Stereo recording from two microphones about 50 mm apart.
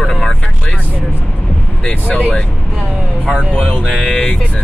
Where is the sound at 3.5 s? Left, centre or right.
Left.